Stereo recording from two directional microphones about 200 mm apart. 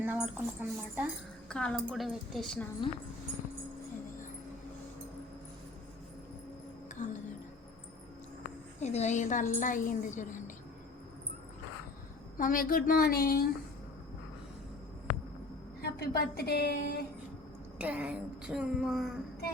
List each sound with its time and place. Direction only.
0.0 s speech: 10° right (ahead or behind)
1.5 s a woman's voice: 5° left (ahead or behind)
6.9 s speech: 40° left (ahead or behind)
8.8 s a woman's voice: 35° left (ahead or behind)
12.4 s a woman's voice: 45° left (ahead or behind)
15.8 s a woman's voice: 50° left (ahead or behind)
17.7 s a woman's voice: 5° right (ahead or behind)